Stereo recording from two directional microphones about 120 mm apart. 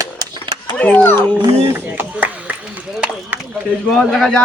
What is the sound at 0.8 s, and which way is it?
Speech, 15° left (ahead or behind).